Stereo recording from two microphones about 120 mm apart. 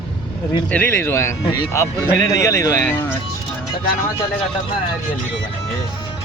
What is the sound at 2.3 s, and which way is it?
Speech, 25° left (ahead or behind).